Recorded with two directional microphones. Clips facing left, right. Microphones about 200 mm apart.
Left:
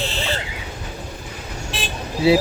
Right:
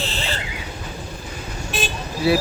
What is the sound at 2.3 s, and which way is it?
Speech, 25° left (ahead or behind).